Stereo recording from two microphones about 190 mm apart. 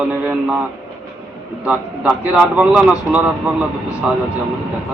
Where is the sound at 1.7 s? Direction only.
5° right (ahead or behind).